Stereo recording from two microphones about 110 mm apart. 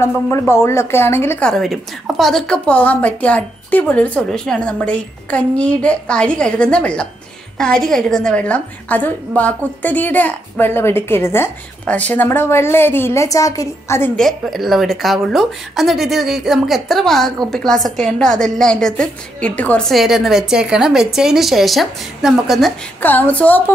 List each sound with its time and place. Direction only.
0.0 s a woman's voice: 25° left (ahead or behind)
1.4 s a woman's voice: centre (ahead or behind); by 14.1 s 25° left (ahead or behind)
14.1 s speech: centre (ahead or behind)
19.9 s speech: centre (ahead or behind)
23.0 s a woman's voice: 15° left (ahead or behind)